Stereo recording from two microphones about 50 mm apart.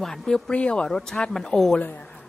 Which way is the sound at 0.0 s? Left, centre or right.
Centre.